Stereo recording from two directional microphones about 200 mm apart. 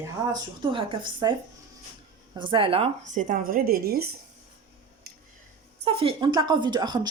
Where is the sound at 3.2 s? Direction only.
45° right (ahead or behind).